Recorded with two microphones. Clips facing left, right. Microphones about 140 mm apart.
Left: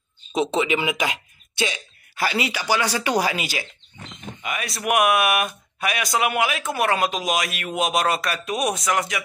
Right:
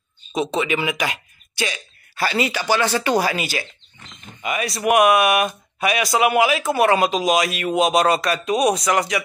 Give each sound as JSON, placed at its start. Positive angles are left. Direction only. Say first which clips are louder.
{"t": 0.3, "sound": "speech", "louder": "even", "side_deg": 25}
{"t": 4.4, "sound": "speech", "louder": "right 6 dB", "side_deg": 0}